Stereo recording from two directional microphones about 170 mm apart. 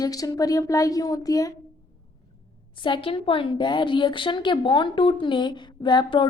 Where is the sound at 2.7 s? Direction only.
30° left (ahead or behind).